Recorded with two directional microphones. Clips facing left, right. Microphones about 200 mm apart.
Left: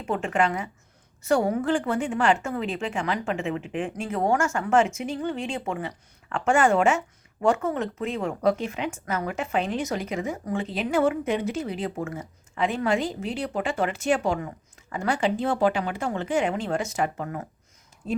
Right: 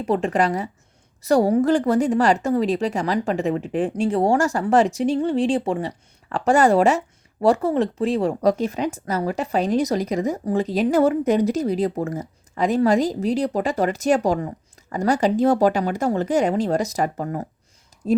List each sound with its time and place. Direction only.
0.0 s speech: 35° right (ahead or behind)